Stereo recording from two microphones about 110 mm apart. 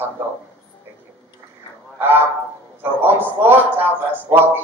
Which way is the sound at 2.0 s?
20° right (ahead or behind).